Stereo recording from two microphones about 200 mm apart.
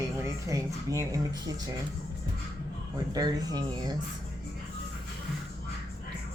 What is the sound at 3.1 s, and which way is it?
Speech, 20° right (ahead or behind).